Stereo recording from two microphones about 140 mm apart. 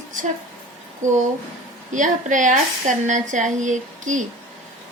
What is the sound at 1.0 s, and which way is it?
A woman's voice, 60° right (ahead or behind).